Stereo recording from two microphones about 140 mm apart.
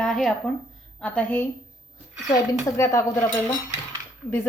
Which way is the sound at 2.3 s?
20° left (ahead or behind).